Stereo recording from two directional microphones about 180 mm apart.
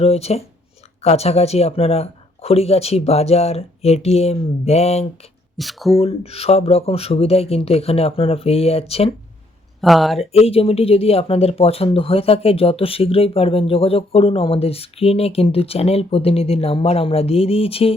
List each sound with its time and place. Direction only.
0.0 s speech: 35° left (ahead or behind)
5.5 s speech: centre (ahead or behind)
6.0 s speech: 35° left (ahead or behind)
9.8 s speech: centre (ahead or behind)
10.2 s speech: 35° left (ahead or behind)